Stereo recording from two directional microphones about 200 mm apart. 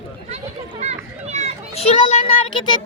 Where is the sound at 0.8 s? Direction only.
35° right (ahead or behind).